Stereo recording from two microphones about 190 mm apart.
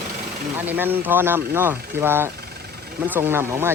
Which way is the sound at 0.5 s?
10° right (ahead or behind).